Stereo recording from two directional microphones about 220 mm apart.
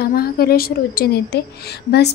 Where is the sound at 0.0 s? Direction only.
45° left (ahead or behind).